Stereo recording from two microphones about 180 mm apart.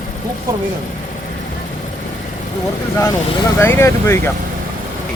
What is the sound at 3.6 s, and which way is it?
Speech, 15° left (ahead or behind).